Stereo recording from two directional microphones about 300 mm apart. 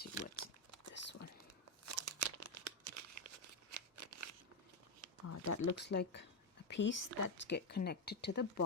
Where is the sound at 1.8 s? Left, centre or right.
Right.